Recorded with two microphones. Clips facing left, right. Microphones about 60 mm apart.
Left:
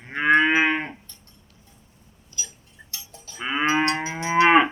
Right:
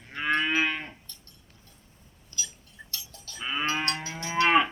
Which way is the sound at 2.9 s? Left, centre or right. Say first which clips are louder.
Left 2 dB; left.